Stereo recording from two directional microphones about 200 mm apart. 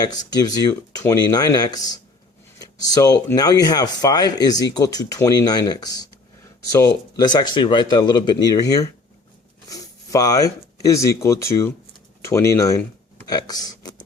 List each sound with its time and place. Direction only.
0.0 s speech: 20° left (ahead or behind)